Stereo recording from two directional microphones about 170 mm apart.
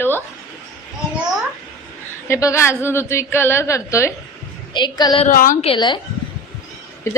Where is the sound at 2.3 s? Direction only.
15° left (ahead or behind).